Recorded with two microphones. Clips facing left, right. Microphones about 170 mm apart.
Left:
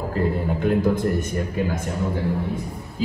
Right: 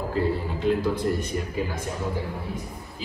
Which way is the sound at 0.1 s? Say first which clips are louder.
Left 3 dB; 55° left (ahead or behind).